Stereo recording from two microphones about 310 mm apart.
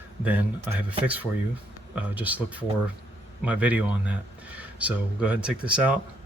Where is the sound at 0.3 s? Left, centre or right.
Centre.